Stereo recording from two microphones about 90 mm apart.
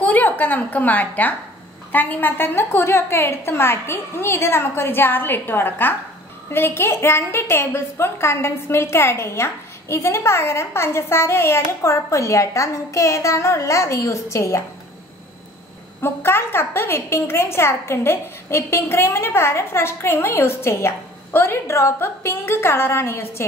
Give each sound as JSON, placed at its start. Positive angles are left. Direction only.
{"t": 0.0, "sound": "a woman's voice", "side_deg": 20}
{"t": 16.0, "sound": "a woman's voice", "side_deg": 25}